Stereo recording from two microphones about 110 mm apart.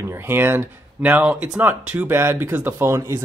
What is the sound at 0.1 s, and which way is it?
Speech, 20° right (ahead or behind).